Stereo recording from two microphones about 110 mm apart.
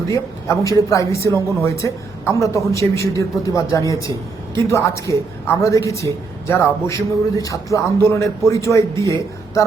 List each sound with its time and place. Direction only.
0.1 s a woman's voice: 30° left (ahead or behind)